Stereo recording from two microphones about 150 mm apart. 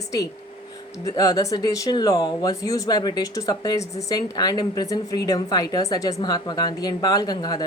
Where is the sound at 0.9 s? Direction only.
25° left (ahead or behind).